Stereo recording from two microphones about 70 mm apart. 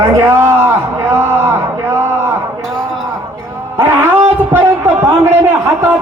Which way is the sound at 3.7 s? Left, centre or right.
Right.